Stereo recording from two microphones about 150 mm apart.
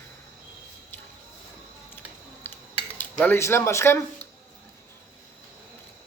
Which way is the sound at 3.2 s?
15° left (ahead or behind).